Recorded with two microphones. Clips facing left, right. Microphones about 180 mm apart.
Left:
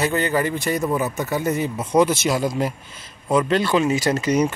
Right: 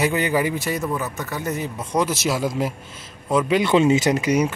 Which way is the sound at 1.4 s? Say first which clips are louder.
Left 4 dB; centre (ahead or behind).